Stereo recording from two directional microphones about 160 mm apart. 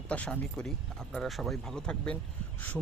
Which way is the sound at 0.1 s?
5° left (ahead or behind).